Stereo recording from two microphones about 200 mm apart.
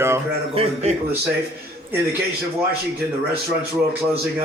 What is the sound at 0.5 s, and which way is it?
Speech, 35° right (ahead or behind).